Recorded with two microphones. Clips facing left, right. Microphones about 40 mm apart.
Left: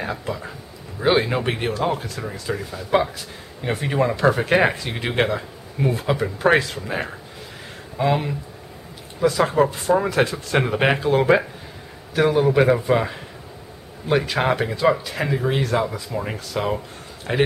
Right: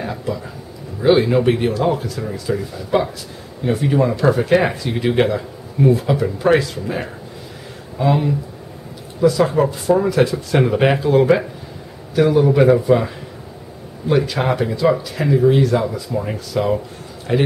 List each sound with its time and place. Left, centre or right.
0.0 s speech: centre
9.4 s speech: centre